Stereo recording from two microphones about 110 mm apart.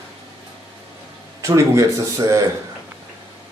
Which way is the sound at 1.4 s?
30° right (ahead or behind).